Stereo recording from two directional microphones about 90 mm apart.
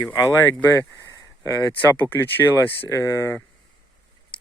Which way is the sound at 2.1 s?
25° left (ahead or behind).